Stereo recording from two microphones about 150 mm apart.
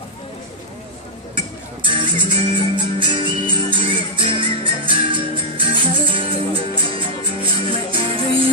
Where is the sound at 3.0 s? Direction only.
35° right (ahead or behind).